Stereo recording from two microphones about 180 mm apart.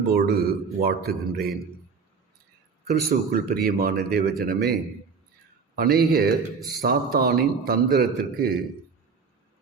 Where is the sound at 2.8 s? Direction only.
50° right (ahead or behind).